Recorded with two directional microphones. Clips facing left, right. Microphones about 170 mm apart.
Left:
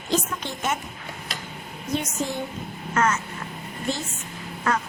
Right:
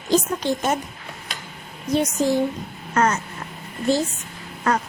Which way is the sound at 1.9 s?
35° right (ahead or behind).